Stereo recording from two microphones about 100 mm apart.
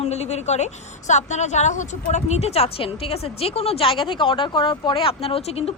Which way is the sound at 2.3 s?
90° left.